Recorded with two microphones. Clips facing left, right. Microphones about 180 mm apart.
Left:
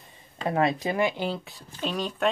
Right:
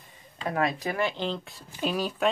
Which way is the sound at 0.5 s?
25° left (ahead or behind).